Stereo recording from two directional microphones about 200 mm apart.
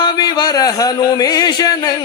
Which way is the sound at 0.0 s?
20° left (ahead or behind).